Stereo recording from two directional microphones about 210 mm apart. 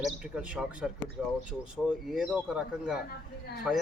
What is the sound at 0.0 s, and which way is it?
A man's voice, 5° right (ahead or behind).